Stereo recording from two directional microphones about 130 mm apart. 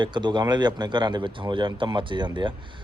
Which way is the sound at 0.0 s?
35° right (ahead or behind).